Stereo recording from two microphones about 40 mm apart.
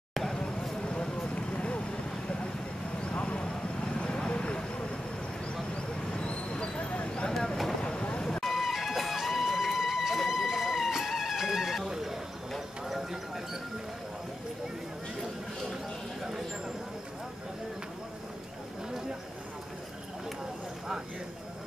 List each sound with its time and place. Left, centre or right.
0.3 s a sound: left
0.7 s vehicle: left
5.8 s a sound: left
7.2 s vehicle: centre
7.8 s vehicle: left
8.2 s vehicle: centre
8.5 s music: centre
12.5 s clip-clop: centre
16.2 s a sound: centre